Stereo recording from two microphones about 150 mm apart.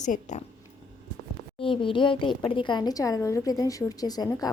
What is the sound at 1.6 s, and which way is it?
A woman's voice, 35° left (ahead or behind).